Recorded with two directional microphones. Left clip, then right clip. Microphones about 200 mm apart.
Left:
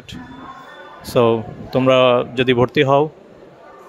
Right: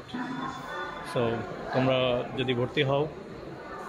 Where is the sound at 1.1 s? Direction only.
50° left (ahead or behind).